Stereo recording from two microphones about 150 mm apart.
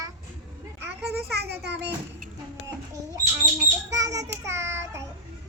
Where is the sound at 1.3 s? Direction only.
90° right.